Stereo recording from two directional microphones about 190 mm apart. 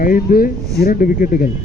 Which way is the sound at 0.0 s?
45° left (ahead or behind).